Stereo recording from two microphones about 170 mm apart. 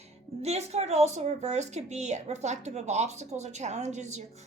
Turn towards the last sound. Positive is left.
turn(degrees=-45)  # may be behind; listen again after turning